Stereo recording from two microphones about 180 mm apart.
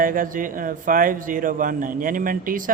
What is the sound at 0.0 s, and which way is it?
A man's voice, 50° right (ahead or behind).